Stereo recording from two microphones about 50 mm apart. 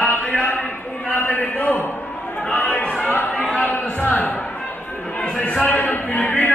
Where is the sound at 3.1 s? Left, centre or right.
Left.